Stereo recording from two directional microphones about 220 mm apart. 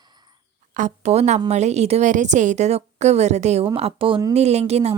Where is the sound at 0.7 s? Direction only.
30° right (ahead or behind).